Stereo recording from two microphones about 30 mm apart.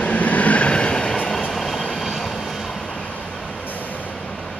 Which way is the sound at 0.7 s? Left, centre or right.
Left.